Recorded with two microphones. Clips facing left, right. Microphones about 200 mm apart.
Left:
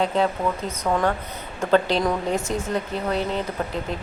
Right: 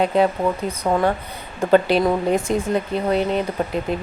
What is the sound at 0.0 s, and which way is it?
Speech, 15° right (ahead or behind).